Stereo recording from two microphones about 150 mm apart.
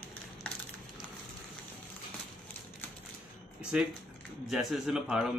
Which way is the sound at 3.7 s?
5° right (ahead or behind).